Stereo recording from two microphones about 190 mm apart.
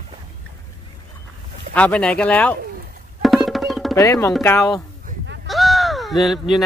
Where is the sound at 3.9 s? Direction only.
15° left (ahead or behind).